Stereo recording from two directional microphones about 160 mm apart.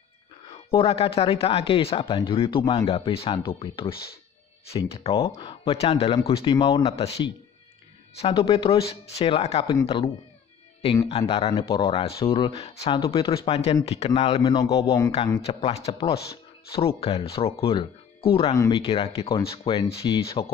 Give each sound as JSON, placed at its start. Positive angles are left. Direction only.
{"t": 0.7, "sound": "speech", "side_deg": 35}
{"t": 6.5, "sound": "a man's voice", "side_deg": 25}
{"t": 8.2, "sound": "speech", "side_deg": 35}
{"t": 9.7, "sound": "speech", "side_deg": 30}
{"t": 14.6, "sound": "a man's voice", "side_deg": 20}
{"t": 15.4, "sound": "a man's voice", "side_deg": 40}